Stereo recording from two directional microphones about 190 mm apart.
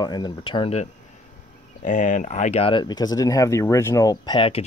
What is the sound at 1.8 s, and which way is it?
Speech, 40° left (ahead or behind).